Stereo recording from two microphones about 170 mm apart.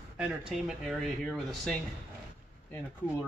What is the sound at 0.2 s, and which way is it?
A man's voice, 5° right (ahead or behind).